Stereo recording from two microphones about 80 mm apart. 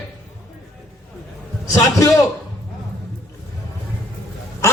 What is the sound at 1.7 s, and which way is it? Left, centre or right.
Speech, left.